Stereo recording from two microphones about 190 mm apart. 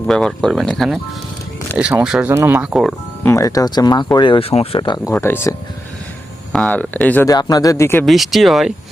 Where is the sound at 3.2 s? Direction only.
15° left (ahead or behind).